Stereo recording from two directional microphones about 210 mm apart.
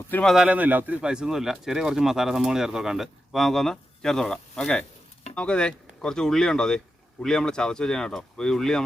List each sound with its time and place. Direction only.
0.1 s speech: 5° left (ahead or behind)